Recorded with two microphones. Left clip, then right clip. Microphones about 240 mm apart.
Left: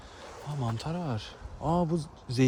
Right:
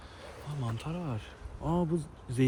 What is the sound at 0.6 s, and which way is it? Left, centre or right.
Speech, left.